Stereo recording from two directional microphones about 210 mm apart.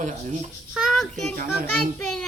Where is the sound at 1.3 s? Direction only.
45° right (ahead or behind).